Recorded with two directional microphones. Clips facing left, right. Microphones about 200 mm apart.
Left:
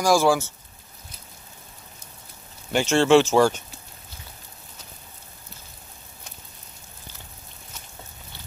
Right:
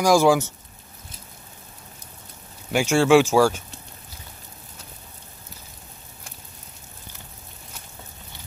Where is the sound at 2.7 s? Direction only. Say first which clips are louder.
Right 1 dB; 10° right (ahead or behind).